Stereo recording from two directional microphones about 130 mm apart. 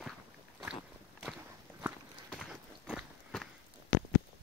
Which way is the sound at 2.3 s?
Centre (ahead or behind).